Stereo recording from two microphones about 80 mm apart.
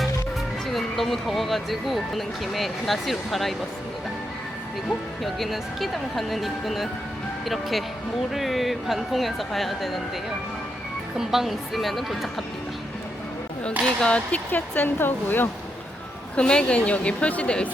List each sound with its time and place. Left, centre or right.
0.7 s speech: centre
4.9 s speech: centre
11.2 s speech: centre
13.8 s speech: centre
16.3 s a woman's voice: centre